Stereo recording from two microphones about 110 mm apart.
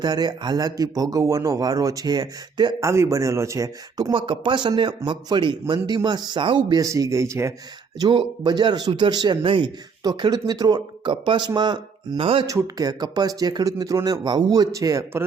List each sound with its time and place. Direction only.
0.0 s speech: 40° right (ahead or behind)
2.8 s speech: 25° right (ahead or behind)
4.1 s speech: 50° right (ahead or behind)
6.8 s speech: 30° right (ahead or behind)
7.9 s speech: 40° right (ahead or behind)
10.0 s speech: 35° right (ahead or behind); by 12.5 s 55° right (ahead or behind)
12.5 s speech: 30° right (ahead or behind)